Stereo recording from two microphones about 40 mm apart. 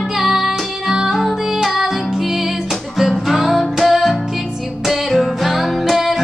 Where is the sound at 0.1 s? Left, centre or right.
Centre.